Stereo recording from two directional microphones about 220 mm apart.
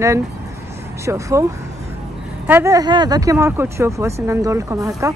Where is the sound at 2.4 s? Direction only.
10° right (ahead or behind).